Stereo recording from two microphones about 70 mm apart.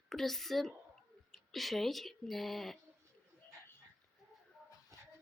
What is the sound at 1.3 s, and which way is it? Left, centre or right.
Speech, centre.